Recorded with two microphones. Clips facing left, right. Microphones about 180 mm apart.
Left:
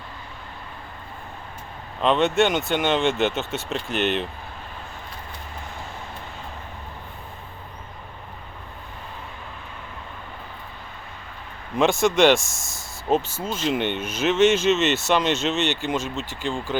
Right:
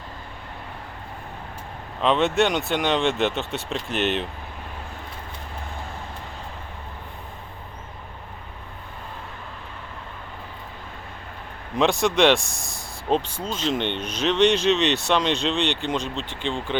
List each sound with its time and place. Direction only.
2.0 s speech: centre (ahead or behind)
11.8 s speech: centre (ahead or behind)